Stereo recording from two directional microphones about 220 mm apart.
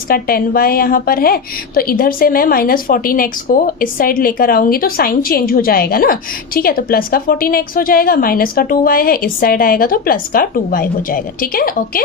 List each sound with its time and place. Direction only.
0.1 s a woman's voice: 40° left (ahead or behind)